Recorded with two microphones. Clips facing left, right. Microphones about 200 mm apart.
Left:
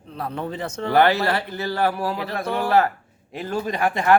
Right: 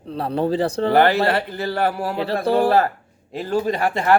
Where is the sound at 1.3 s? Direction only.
60° right (ahead or behind).